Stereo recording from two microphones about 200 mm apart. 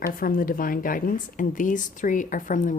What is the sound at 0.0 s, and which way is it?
Speech, 45° left (ahead or behind).